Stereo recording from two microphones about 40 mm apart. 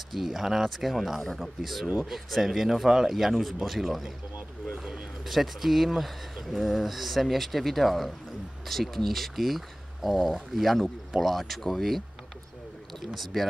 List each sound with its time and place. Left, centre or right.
0.1 s speech: centre
5.3 s speech: centre
13.0 s speech: centre